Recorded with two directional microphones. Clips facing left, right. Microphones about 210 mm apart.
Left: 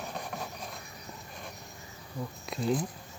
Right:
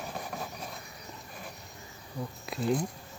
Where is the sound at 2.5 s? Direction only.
Centre (ahead or behind).